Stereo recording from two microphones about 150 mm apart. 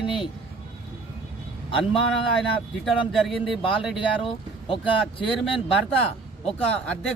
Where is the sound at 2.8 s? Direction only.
Centre (ahead or behind).